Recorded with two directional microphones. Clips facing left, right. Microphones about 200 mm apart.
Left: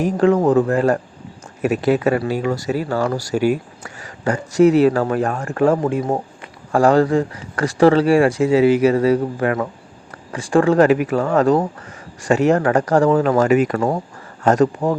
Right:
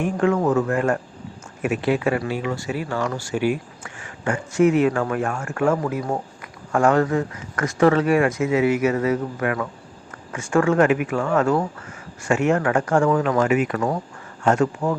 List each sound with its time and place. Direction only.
0.0 s speech: 35° left (ahead or behind)